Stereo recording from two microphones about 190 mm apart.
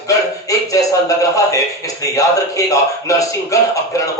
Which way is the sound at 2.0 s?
15° left (ahead or behind).